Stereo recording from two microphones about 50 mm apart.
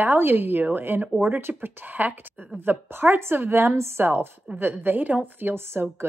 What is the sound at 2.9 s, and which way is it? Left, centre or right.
A woman's voice, right.